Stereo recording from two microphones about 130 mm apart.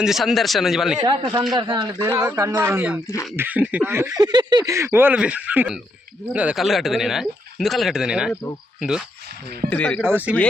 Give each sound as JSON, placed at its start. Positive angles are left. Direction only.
{"t": 0.0, "sound": "speech", "side_deg": 0}
{"t": 1.0, "sound": "speech", "side_deg": -35}
{"t": 4.2, "sound": "speech", "side_deg": -35}
{"t": 8.3, "sound": "speech", "side_deg": 20}
{"t": 8.8, "sound": "speech", "side_deg": -5}
{"t": 9.6, "sound": "speech", "side_deg": 10}
{"t": 10.0, "sound": "speech", "side_deg": -15}